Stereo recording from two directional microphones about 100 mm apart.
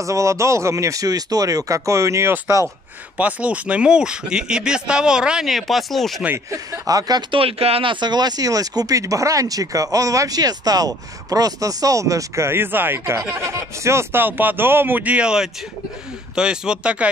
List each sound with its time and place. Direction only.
0.0 s speech: 30° right (ahead or behind)
3.2 s speech: 15° right (ahead or behind); by 6.2 s centre (ahead or behind)
6.5 s speech: 40° right (ahead or behind)
7.3 s speech: 75° right (ahead or behind)
7.9 s speech: 45° right (ahead or behind); by 17.1 s 10° right (ahead or behind)